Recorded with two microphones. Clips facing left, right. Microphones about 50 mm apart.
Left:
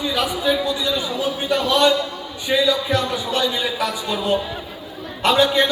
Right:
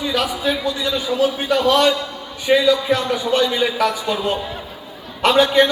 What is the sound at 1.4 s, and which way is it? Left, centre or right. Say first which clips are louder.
A man's voice: left 1 dB; right.